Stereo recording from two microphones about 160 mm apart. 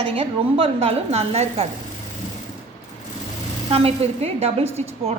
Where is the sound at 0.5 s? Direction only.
35° right (ahead or behind).